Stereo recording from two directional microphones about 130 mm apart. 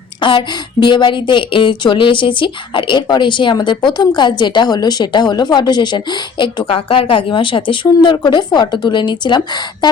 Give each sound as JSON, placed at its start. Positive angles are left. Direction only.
{"t": 0.2, "sound": "speech", "side_deg": 40}